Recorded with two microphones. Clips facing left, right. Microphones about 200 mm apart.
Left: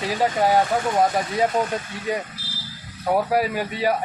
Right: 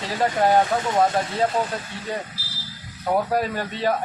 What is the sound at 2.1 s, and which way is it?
Speech, 10° left (ahead or behind).